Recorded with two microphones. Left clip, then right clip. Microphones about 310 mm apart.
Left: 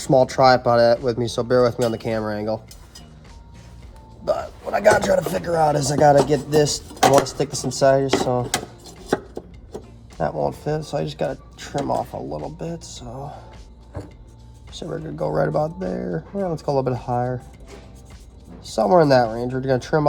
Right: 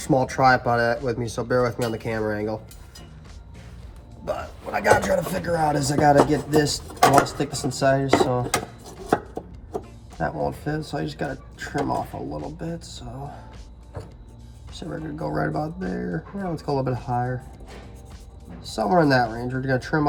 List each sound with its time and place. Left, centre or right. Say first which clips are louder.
0.1 s speech: left 4 dB; left
4.4 s speech: left 4 dB; left
9.0 s chopping: right 1 dB; centre
10.2 s speech: left 3 dB; left
14.8 s speech: left 5 dB; left
18.7 s speech: left 5 dB; left